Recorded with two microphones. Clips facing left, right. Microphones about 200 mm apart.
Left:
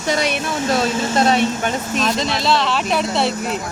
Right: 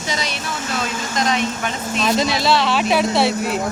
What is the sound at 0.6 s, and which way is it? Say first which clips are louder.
Speech: left 8 dB; 35° left (ahead or behind).